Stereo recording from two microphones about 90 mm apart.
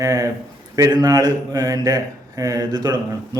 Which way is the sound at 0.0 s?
40° right (ahead or behind).